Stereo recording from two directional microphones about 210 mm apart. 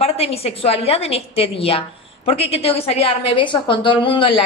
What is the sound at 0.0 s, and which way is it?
Speech, 30° left (ahead or behind).